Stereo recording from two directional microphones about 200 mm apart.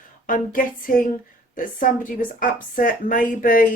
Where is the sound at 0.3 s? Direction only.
45° left (ahead or behind).